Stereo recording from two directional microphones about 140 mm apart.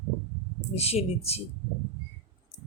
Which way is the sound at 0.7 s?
45° left (ahead or behind).